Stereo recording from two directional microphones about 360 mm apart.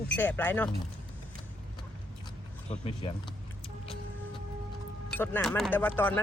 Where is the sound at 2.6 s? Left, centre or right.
Centre.